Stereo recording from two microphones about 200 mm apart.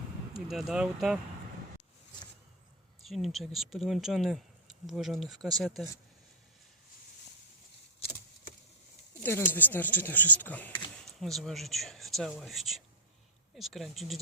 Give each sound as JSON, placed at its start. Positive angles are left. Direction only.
{"t": 0.4, "sound": "speech", "side_deg": 0}
{"t": 3.0, "sound": "speech", "side_deg": 0}
{"t": 9.2, "sound": "speech", "side_deg": 10}
{"t": 10.7, "sound": "speech", "side_deg": 25}
{"t": 11.0, "sound": "speech", "side_deg": 0}